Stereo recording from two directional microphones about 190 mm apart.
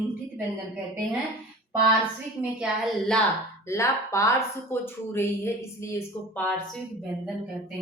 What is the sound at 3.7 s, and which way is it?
A woman's voice, 15° left (ahead or behind).